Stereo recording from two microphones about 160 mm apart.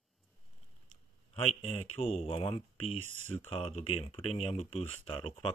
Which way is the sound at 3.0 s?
45° right (ahead or behind).